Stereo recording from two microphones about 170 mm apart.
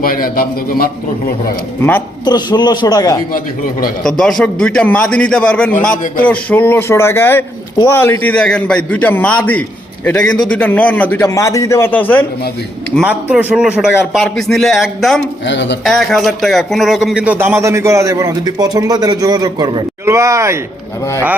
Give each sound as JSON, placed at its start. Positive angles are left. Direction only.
{"t": 0.0, "sound": "a man's voice", "side_deg": 60}
{"t": 2.2, "sound": "a man's voice", "side_deg": 25}
{"t": 4.0, "sound": "a man's voice", "side_deg": 0}
{"t": 12.9, "sound": "speech", "side_deg": -15}
{"t": 15.4, "sound": "speech", "side_deg": 90}
{"t": 15.8, "sound": "speech", "side_deg": 0}